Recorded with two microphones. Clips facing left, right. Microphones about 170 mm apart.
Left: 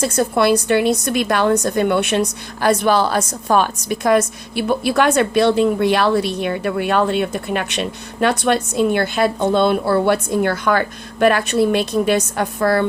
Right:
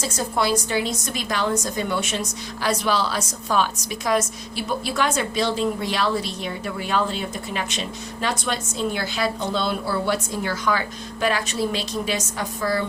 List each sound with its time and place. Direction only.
0.0 s a woman's voice: 60° left (ahead or behind)